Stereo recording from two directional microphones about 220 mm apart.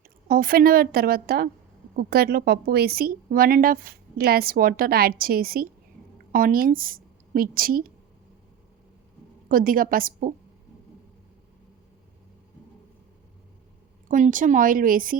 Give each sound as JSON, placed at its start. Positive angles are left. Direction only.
{"t": 0.3, "sound": "a woman's voice", "side_deg": -40}
{"t": 9.5, "sound": "speech", "side_deg": -40}
{"t": 14.1, "sound": "speech", "side_deg": -35}